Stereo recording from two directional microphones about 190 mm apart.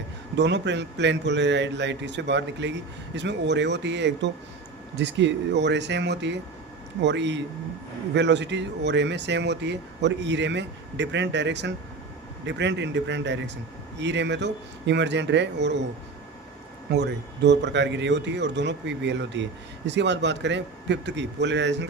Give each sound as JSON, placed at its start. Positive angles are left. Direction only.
{"t": 0.3, "sound": "a man's voice", "side_deg": -65}
{"t": 16.9, "sound": "a man's voice", "side_deg": -60}